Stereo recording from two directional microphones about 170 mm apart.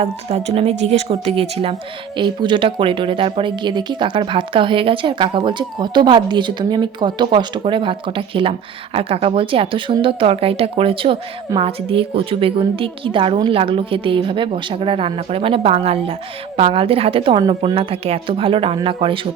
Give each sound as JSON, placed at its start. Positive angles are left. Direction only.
{"t": 0.0, "sound": "speech", "side_deg": -40}